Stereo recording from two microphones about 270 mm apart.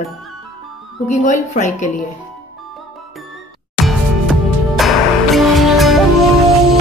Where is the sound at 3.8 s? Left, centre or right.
Centre.